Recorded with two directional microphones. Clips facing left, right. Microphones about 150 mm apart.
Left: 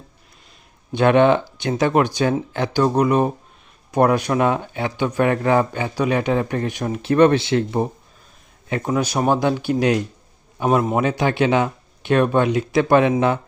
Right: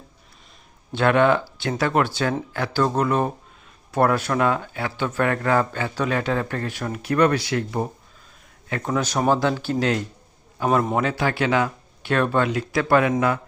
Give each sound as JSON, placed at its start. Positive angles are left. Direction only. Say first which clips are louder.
{"t": 0.9, "sound": "speech", "louder": "left 3 dB", "side_deg": 20}